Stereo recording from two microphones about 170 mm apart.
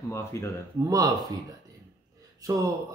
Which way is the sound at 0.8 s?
20° right (ahead or behind).